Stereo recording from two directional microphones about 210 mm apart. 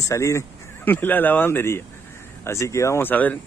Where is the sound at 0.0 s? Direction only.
15° left (ahead or behind).